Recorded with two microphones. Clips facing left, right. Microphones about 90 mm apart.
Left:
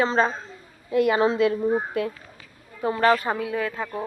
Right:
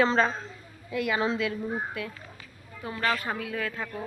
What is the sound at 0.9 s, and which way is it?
A woman's voice, 45° left (ahead or behind).